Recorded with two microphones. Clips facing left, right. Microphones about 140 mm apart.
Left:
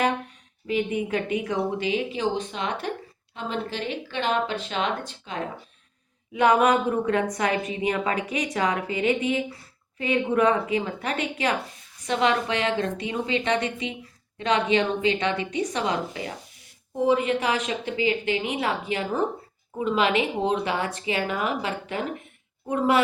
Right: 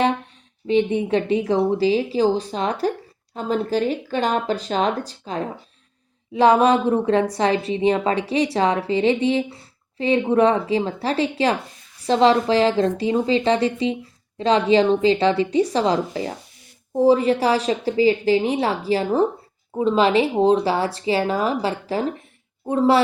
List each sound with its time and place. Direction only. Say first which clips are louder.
0.7 s a woman's voice: right 7 dB; 30° right (ahead or behind)